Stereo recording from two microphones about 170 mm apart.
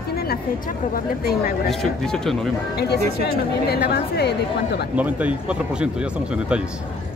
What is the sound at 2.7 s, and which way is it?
A woman's voice, 75° left (ahead or behind).